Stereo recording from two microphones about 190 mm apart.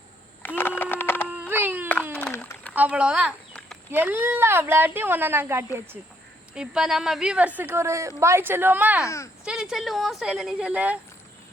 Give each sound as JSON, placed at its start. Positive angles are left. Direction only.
{"t": 0.4, "sound": "a sound", "side_deg": 10}
{"t": 1.3, "sound": "baby cry", "side_deg": -10}
{"t": 2.1, "sound": "a sound", "side_deg": 5}
{"t": 2.7, "sound": "a woman's voice", "side_deg": -5}
{"t": 9.0, "sound": "speech", "side_deg": 15}
{"t": 9.4, "sound": "speech", "side_deg": -5}